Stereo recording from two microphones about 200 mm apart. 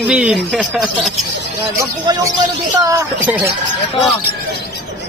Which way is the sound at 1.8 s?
15° right (ahead or behind).